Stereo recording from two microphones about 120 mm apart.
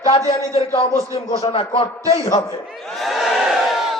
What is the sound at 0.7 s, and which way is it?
A man's voice, 55° left (ahead or behind).